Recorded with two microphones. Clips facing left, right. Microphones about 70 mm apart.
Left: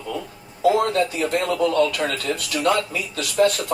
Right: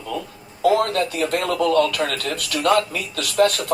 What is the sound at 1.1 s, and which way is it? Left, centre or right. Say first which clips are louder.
Speech: even; right.